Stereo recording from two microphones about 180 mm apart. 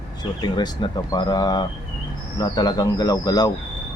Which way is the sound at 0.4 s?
25° left (ahead or behind).